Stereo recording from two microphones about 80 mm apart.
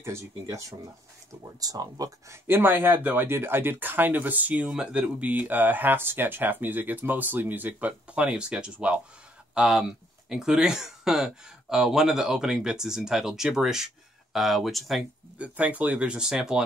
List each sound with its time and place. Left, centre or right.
0.0 s speech: right
1.6 s speech: right
2.4 s speech: right; by 15.0 s centre
15.3 s speech: centre